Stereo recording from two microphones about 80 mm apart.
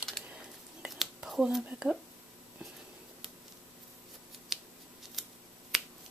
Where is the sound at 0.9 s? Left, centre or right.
Centre.